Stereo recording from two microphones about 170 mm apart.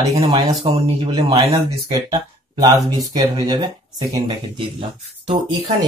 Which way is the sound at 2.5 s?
20° right (ahead or behind).